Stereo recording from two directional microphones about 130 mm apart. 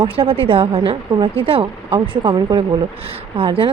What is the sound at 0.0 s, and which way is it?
Speech, 45° right (ahead or behind).